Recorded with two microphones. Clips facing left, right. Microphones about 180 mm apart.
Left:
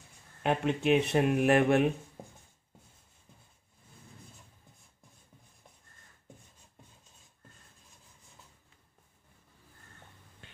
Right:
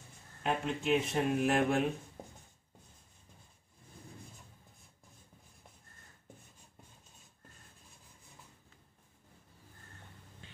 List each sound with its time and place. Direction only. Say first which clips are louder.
0.4 s speech: left 5 dB; 65° left (ahead or behind)